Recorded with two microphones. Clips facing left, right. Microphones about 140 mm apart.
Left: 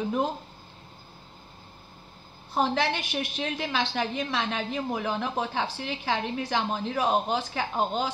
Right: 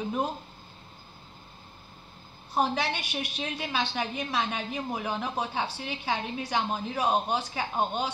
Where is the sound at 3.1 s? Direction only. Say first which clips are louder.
Left 3 dB; 65° left (ahead or behind).